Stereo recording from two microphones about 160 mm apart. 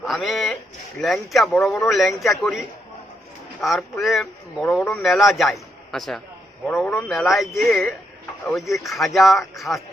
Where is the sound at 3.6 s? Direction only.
Centre (ahead or behind).